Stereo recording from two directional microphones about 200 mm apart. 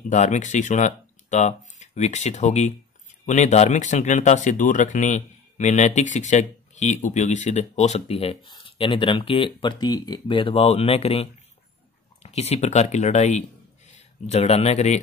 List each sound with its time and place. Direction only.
0.1 s speech: 35° left (ahead or behind)